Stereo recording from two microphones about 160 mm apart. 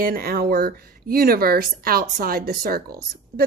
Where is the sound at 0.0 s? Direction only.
65° right (ahead or behind).